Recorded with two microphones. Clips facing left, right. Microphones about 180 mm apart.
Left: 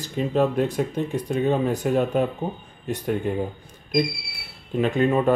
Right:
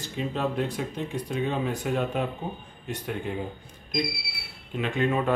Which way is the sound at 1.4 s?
40° left (ahead or behind).